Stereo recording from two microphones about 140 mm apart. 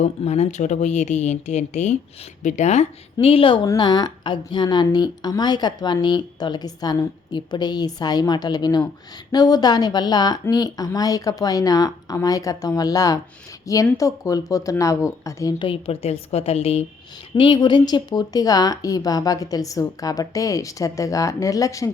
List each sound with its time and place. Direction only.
0.0 s a woman's voice: 55° left (ahead or behind); by 15.5 s 20° left (ahead or behind)
15.5 s a woman's voice: 40° left (ahead or behind); by 21.8 s 25° left (ahead or behind)